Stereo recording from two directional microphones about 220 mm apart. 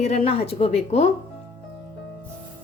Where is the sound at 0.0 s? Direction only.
30° left (ahead or behind).